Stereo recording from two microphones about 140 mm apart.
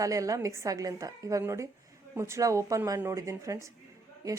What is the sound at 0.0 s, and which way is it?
A woman's voice, 25° right (ahead or behind).